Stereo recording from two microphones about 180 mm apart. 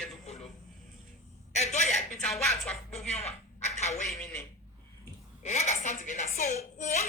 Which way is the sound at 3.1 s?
35° left (ahead or behind).